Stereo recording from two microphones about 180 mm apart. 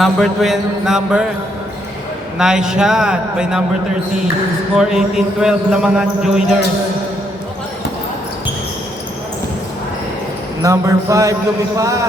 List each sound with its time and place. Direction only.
0.0 s speech: centre (ahead or behind)
2.4 s speech: 5° right (ahead or behind)
4.8 s speech: 5° right (ahead or behind)
10.6 s a sound: 20° right (ahead or behind)